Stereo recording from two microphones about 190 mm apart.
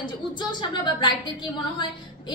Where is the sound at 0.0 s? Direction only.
25° left (ahead or behind).